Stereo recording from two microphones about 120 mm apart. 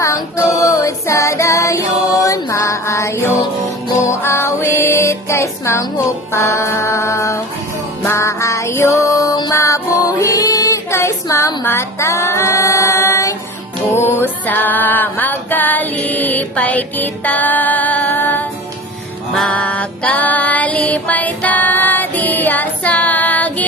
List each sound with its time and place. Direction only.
0.0 s music: 25° left (ahead or behind)